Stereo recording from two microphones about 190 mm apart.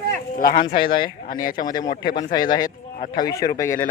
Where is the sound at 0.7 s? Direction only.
50° left (ahead or behind).